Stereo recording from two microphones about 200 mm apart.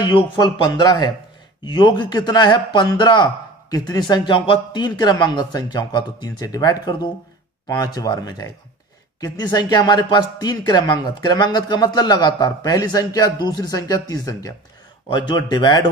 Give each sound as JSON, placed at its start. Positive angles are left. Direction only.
{"t": 0.0, "sound": "speech", "side_deg": 25}